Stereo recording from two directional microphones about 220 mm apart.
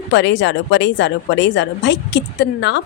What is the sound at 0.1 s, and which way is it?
A woman's voice, 55° left (ahead or behind).